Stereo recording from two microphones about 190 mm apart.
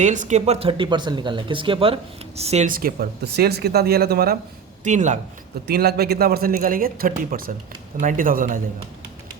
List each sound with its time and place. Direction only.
0.0 s speech: 40° right (ahead or behind); by 4.4 s 55° right (ahead or behind)
4.8 s speech: 40° right (ahead or behind)
5.6 s speech: 55° right (ahead or behind)